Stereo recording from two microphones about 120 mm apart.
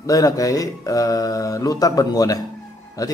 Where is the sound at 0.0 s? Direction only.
30° left (ahead or behind).